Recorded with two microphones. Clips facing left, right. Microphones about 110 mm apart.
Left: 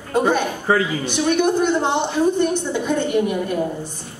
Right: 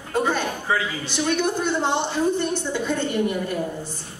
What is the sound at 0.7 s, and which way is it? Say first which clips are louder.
Speech: left 7 dB; 45° left (ahead or behind).